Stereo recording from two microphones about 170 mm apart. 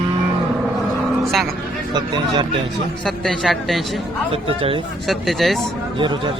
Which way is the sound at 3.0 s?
Centre (ahead or behind).